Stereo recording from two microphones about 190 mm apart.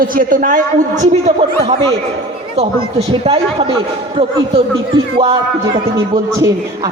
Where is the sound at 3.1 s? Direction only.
30° right (ahead or behind).